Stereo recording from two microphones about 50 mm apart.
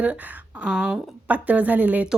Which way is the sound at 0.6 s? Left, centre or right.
Centre.